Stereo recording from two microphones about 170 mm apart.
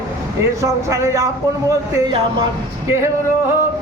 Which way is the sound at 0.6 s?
20° right (ahead or behind).